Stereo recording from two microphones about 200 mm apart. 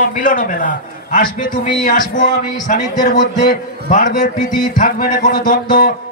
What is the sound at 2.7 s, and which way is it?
A man's voice, 40° left (ahead or behind).